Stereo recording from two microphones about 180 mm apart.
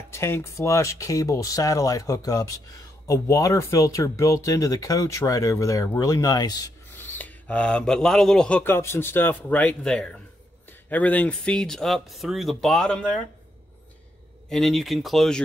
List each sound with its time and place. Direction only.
0.1 s speech: 15° left (ahead or behind)
7.2 s speech: 10° left (ahead or behind)
14.5 s speech: centre (ahead or behind)